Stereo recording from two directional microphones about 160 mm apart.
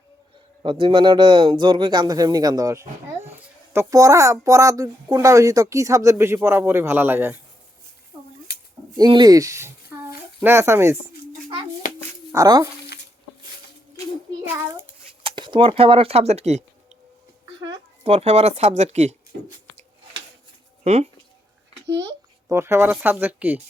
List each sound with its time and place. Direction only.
0.6 s speech: 30° right (ahead or behind); by 7.3 s 15° right (ahead or behind)
9.0 s speech: 25° right (ahead or behind)
12.3 s speech: 20° right (ahead or behind)
15.2 s speech: 30° right (ahead or behind)
18.0 s speech: 45° right (ahead or behind)
20.8 s speech: 45° right (ahead or behind)
21.9 s speech: 20° right (ahead or behind)